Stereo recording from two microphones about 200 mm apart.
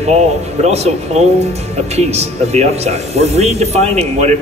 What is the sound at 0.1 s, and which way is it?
A man's voice, 35° right (ahead or behind).